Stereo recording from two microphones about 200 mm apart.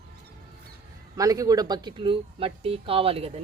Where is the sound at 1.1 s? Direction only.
15° right (ahead or behind).